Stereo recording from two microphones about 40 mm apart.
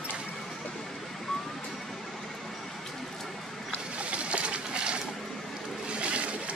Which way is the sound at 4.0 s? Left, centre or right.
Right.